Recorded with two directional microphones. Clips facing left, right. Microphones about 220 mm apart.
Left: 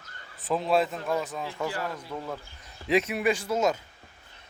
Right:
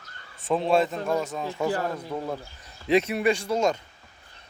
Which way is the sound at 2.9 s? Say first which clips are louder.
Right 3 dB; centre (ahead or behind).